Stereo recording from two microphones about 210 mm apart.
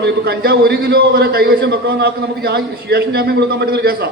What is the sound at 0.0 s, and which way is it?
A man's voice, 50° right (ahead or behind).